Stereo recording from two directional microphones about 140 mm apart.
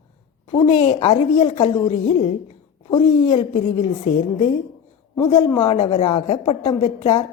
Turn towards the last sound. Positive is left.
turn(degrees=45)  # may be behind; listen again after turning